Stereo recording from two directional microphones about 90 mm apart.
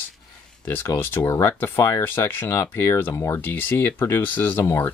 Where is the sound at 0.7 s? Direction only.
20° left (ahead or behind).